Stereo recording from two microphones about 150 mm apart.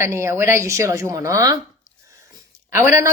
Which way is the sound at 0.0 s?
15° right (ahead or behind).